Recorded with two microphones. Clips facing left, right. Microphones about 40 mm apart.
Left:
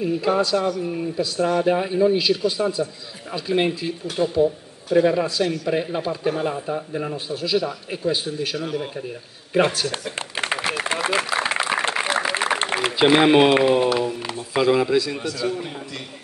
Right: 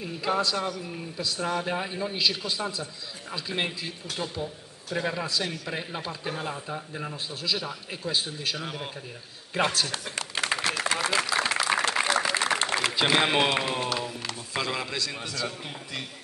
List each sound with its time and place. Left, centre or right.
0.0 s a man's voice: centre
8.5 s speech: centre
9.5 s a man's voice: centre
11.0 s a sound: left
13.3 s a man's voice: centre
15.4 s a man's voice: centre